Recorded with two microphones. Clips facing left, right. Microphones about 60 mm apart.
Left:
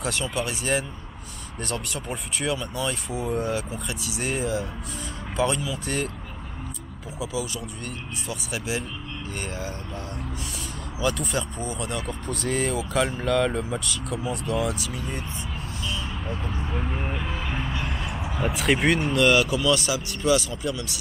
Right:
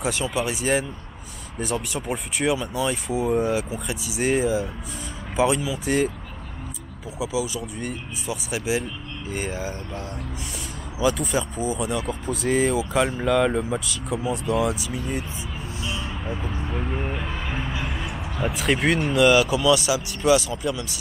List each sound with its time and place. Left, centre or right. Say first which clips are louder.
0.0 s speech: right 3 dB; centre
7.2 s speech: right 4 dB; centre